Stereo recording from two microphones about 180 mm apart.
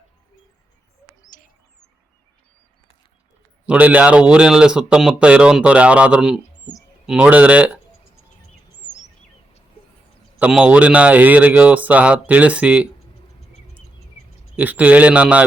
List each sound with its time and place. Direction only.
1.3 s bird: 45° left (ahead or behind)
3.7 s speech: 10° right (ahead or behind)
10.3 s speech: 5° right (ahead or behind)
14.5 s speech: 10° right (ahead or behind)